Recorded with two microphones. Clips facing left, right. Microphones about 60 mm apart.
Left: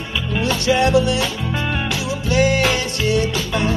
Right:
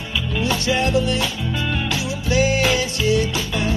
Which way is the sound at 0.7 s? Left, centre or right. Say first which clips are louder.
Left 6 dB; left.